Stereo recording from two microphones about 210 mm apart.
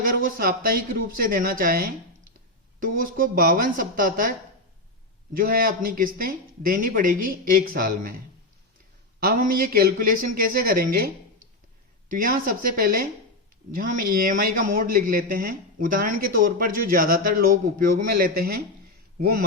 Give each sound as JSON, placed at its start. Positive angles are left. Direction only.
{"t": 0.0, "sound": "a man's voice", "side_deg": -40}
{"t": 9.2, "sound": "speech", "side_deg": -40}
{"t": 12.0, "sound": "a man's voice", "side_deg": -40}